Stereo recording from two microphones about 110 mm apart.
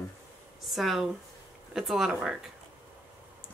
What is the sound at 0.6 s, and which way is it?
Speech, centre (ahead or behind).